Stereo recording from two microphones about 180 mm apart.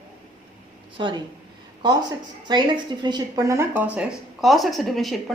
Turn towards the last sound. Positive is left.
turn(degrees=0)  # may be behind; listen again after turning